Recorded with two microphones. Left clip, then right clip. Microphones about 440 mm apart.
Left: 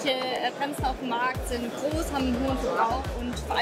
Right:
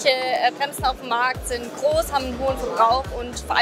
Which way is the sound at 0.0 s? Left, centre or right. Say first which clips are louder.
Right 7 dB; right.